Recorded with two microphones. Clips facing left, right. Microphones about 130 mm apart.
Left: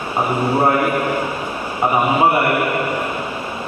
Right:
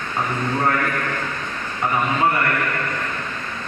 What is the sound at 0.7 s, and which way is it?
A man's voice, 15° left (ahead or behind).